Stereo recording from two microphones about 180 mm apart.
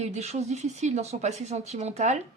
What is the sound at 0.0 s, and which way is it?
Speech, 35° right (ahead or behind).